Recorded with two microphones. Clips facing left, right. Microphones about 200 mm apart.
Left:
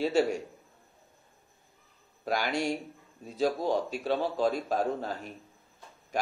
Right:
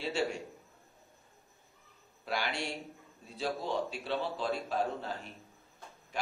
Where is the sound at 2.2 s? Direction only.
40° left (ahead or behind).